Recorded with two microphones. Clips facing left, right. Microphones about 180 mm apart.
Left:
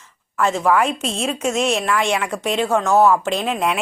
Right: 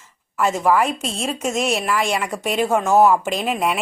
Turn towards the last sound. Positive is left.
turn(degrees=-5)  # may be behind; listen again after turning